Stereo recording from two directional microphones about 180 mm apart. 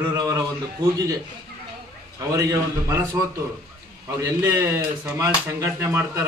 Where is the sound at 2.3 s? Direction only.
20° right (ahead or behind).